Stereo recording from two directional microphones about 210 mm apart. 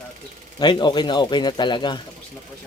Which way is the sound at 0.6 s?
20° left (ahead or behind).